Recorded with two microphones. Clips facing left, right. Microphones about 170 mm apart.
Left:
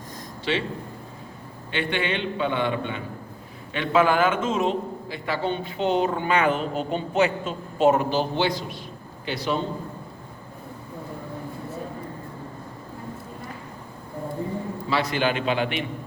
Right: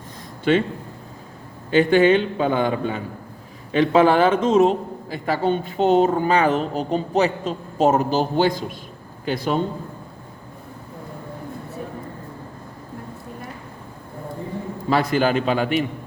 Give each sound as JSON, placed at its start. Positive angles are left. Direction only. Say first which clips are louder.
{"t": 0.5, "sound": "a man's voice", "louder": "right 8 dB", "side_deg": -50}
{"t": 1.7, "sound": "a man's voice", "louder": "right 12 dB", "side_deg": -40}
{"t": 14.8, "sound": "a man's voice", "louder": "right 5 dB", "side_deg": -45}